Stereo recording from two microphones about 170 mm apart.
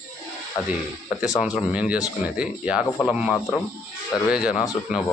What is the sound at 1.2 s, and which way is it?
Speech, 5° right (ahead or behind).